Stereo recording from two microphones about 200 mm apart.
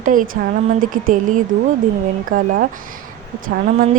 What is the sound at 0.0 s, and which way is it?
A woman's voice, 40° right (ahead or behind).